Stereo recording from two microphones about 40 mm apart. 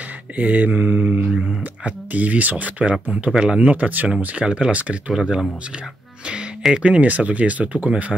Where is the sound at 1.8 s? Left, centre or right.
Right.